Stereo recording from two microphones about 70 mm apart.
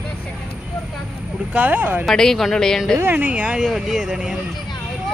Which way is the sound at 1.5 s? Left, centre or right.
Right.